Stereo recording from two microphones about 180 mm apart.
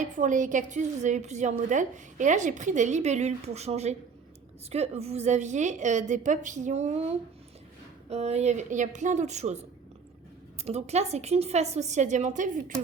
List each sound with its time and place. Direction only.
0.0 s a woman's voice: 45° right (ahead or behind)
8.1 s a woman's voice: 35° right (ahead or behind)
10.6 s a woman's voice: 35° right (ahead or behind)